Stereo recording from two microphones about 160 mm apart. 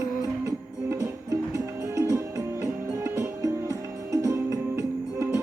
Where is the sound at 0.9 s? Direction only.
20° right (ahead or behind).